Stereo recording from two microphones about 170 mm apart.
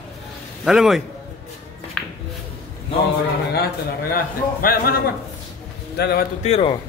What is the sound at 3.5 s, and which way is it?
A man's voice, 65° left (ahead or behind).